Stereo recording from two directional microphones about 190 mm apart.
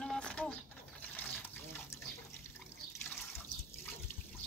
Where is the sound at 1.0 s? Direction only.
10° left (ahead or behind).